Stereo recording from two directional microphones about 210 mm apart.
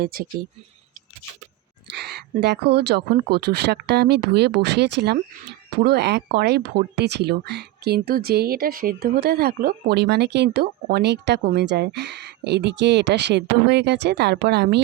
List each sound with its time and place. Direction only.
0.0 s speech: 45° right (ahead or behind)
1.9 s speech: 50° right (ahead or behind)